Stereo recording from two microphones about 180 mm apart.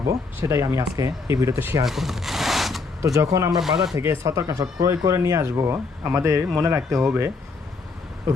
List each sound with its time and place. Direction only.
0.4 s speech: 15° right (ahead or behind)
1.8 s zipper: centre (ahead or behind)
3.0 s speech: 15° right (ahead or behind)
3.6 s speech: centre (ahead or behind)
3.9 s speech: 15° right (ahead or behind)